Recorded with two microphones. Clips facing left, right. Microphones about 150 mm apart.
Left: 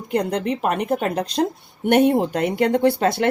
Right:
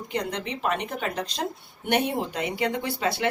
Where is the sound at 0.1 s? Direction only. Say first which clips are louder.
Left 9 dB; 45° left (ahead or behind).